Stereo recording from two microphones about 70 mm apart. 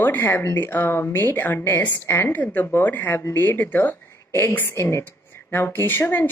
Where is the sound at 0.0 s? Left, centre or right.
Left.